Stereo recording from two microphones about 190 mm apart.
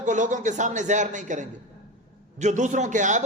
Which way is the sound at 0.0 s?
40° right (ahead or behind).